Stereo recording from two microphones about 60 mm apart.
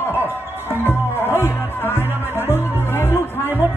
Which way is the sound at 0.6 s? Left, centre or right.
Left.